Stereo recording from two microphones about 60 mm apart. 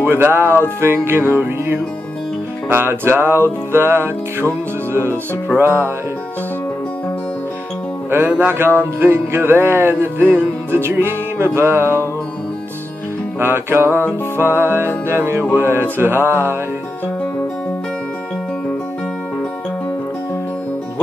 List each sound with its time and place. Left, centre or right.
0.0 s music: right
8.1 s music: right
13.4 s music: right